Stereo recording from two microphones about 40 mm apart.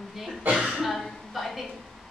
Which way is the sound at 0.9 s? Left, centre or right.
Centre.